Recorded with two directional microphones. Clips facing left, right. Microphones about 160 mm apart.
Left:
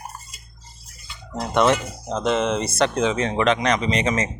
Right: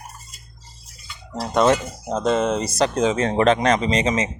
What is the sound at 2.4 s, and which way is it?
Speech, 40° right (ahead or behind).